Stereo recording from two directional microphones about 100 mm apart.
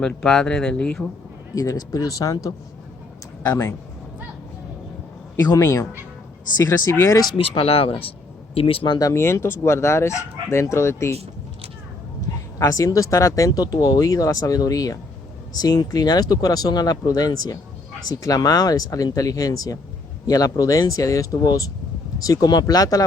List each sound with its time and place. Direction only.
0.0 s speech: 10° left (ahead or behind)
1.5 s speech: 35° left (ahead or behind)
3.5 s speech: 25° left (ahead or behind)
5.4 s speech: 35° left (ahead or behind)
7.3 s speech: 70° left (ahead or behind)
9.0 s speech: 30° left (ahead or behind)
11.1 s a sound: 90° right
12.5 s speech: 35° left (ahead or behind)